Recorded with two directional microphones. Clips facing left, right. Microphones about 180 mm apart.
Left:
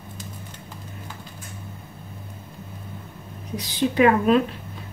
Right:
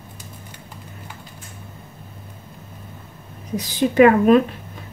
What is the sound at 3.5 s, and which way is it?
Speech, 45° right (ahead or behind).